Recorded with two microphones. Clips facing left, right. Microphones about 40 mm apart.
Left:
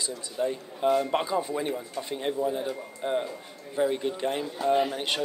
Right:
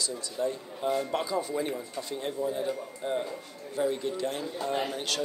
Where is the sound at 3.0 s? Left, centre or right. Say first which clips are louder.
Left 3 dB; left.